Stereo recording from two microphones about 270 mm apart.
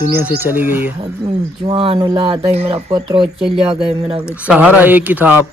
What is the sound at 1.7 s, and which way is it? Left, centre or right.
Speech, centre.